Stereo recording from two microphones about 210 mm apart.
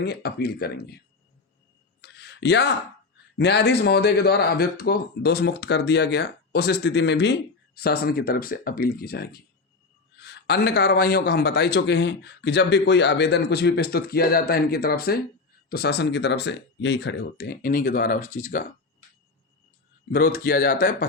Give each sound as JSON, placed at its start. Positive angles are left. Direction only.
{"t": 0.0, "sound": "a man's voice", "side_deg": 50}
{"t": 2.0, "sound": "a sound", "side_deg": 55}
{"t": 3.3, "sound": "a man's voice", "side_deg": 50}
{"t": 20.1, "sound": "a man's voice", "side_deg": 45}